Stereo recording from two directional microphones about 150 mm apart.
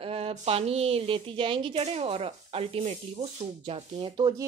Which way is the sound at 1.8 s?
45° right (ahead or behind).